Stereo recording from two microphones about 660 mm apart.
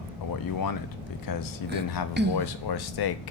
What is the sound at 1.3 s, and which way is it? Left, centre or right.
Speech, left.